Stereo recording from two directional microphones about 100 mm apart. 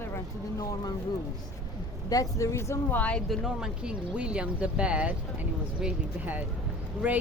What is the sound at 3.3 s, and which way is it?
Speech, 5° right (ahead or behind).